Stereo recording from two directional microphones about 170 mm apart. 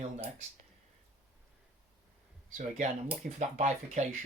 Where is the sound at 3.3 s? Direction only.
45° right (ahead or behind).